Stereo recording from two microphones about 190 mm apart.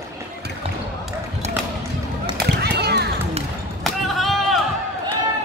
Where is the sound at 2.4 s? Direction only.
60° right (ahead or behind).